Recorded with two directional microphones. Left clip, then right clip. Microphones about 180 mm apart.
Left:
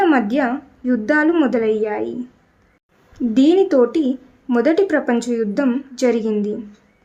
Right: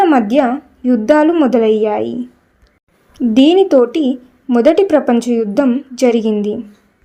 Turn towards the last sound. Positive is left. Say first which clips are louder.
# right 5 dB
turn(degrees=-20)  # may be behind; listen again after turning